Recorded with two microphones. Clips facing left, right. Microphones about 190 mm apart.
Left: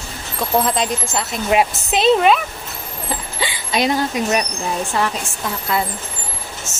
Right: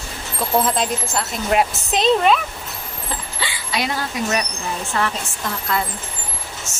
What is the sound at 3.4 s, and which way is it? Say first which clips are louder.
A woman's voice: left 6 dB; 20° left (ahead or behind).